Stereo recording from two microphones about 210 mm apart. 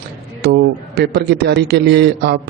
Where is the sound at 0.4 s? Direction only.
50° right (ahead or behind).